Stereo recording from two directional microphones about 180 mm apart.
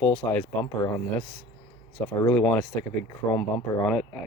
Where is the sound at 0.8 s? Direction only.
20° left (ahead or behind).